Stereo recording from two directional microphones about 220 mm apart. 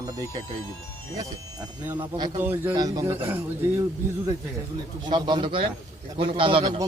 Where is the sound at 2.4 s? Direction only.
10° right (ahead or behind).